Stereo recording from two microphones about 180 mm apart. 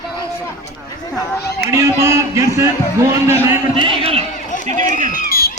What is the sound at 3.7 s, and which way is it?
Speech, 30° right (ahead or behind).